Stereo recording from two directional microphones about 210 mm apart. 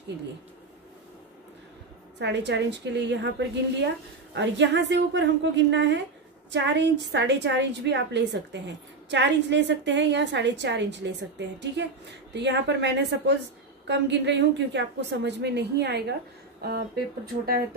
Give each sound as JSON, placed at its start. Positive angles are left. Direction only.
{"t": 2.1, "sound": "a woman's voice", "side_deg": -55}